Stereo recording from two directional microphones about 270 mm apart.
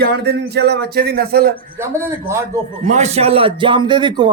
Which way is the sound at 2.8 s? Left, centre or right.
Right.